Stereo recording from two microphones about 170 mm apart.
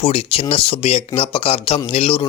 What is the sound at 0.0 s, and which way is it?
A man's voice, 35° left (ahead or behind).